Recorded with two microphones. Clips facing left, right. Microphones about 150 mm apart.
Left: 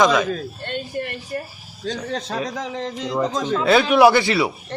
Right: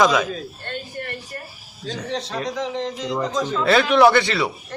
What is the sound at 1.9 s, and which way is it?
A man's voice, 40° left (ahead or behind).